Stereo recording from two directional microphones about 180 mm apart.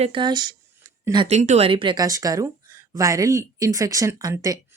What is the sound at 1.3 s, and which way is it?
Speech, 40° right (ahead or behind).